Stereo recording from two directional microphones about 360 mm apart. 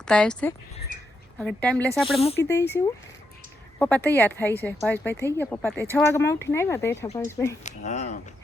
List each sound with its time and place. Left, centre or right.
0.0 s speech: centre
7.6 s speech: centre